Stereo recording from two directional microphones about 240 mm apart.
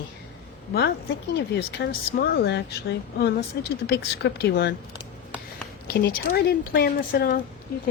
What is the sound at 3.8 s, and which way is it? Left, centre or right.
Speech, left.